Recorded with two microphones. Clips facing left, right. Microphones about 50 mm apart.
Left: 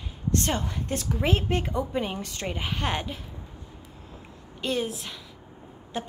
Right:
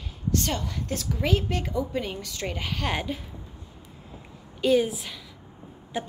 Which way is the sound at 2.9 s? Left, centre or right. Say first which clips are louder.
Right 3 dB; centre.